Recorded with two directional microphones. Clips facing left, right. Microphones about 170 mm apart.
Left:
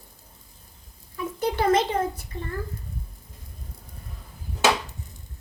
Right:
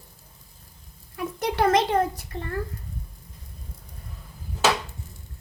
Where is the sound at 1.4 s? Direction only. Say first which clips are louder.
Even; 70° right (ahead or behind).